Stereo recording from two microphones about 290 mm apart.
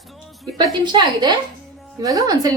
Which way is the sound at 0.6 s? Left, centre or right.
Centre.